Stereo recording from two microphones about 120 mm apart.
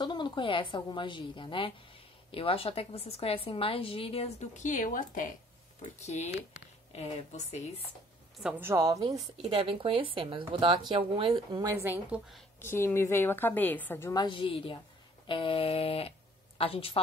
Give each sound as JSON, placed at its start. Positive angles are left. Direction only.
{"t": 0.0, "sound": "a woman's voice", "side_deg": 40}
{"t": 4.6, "sound": "speech", "side_deg": 90}
{"t": 5.9, "sound": "speech", "side_deg": 70}
{"t": 7.3, "sound": "speech", "side_deg": 70}
{"t": 8.5, "sound": "a woman's voice", "side_deg": -20}
{"t": 9.0, "sound": "speech", "side_deg": -40}
{"t": 11.8, "sound": "a woman's voice", "side_deg": -15}
{"t": 12.5, "sound": "a woman's voice", "side_deg": 20}
{"t": 14.1, "sound": "a woman's voice", "side_deg": 45}
{"t": 15.2, "sound": "a sound", "side_deg": 45}
{"t": 16.5, "sound": "a woman's voice", "side_deg": 55}